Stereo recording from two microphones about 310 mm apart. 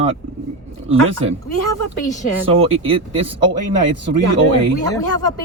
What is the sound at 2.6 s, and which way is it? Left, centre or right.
Speech, centre.